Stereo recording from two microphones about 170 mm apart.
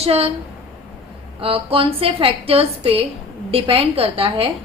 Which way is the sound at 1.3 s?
35° right (ahead or behind).